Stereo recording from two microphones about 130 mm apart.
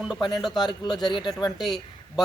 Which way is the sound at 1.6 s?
Centre (ahead or behind).